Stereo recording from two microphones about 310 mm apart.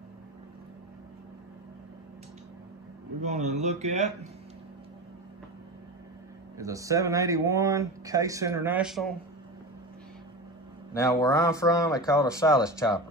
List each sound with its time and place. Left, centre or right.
3.2 s speech: right
6.6 s speech: centre
10.9 s speech: centre